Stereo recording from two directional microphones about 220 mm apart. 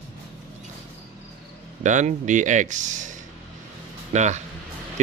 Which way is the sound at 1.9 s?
35° right (ahead or behind).